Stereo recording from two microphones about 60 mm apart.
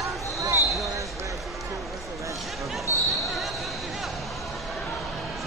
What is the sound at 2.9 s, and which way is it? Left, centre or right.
Basketball bounce, left.